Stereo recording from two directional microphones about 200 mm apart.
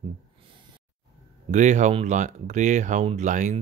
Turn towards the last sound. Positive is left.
turn(degrees=-35)  # may be behind; listen again after turning